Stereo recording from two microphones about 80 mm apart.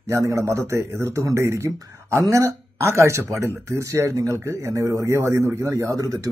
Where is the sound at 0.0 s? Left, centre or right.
Right.